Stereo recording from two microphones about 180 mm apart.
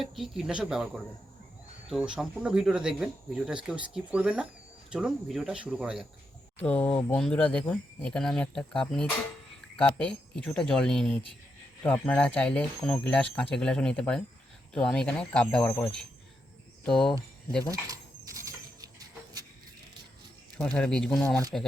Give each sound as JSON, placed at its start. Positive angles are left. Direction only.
{"t": 0.0, "sound": "speech", "side_deg": 0}
{"t": 6.6, "sound": "speech", "side_deg": 10}
{"t": 17.7, "sound": "a sound", "side_deg": -20}
{"t": 20.7, "sound": "speech", "side_deg": 5}